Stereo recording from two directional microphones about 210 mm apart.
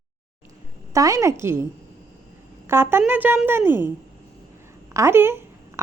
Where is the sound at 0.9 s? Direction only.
15° right (ahead or behind).